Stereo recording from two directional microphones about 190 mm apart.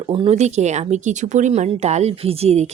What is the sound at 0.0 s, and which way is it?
Speech, 30° right (ahead or behind).